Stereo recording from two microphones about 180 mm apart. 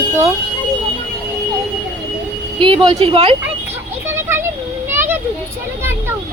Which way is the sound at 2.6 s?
30° right (ahead or behind).